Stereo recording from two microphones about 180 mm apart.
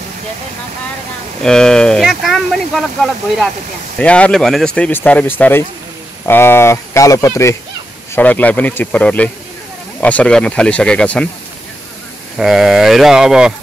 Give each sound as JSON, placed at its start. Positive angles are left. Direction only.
{"t": 1.4, "sound": "speech", "side_deg": 5}
{"t": 12.4, "sound": "speech", "side_deg": 0}